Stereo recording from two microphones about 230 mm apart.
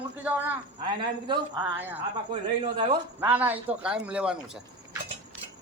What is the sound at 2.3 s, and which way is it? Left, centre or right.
Speech, right.